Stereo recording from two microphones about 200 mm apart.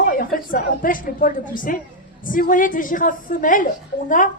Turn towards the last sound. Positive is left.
turn(degrees=40)  # may be behind; listen again after turning